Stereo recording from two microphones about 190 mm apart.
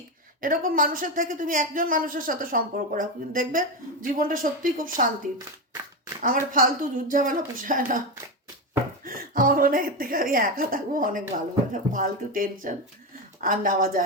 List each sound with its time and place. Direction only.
0.4 s speech: 45° right (ahead or behind)
6.2 s speech: 45° right (ahead or behind)
9.0 s speech: 50° right (ahead or behind)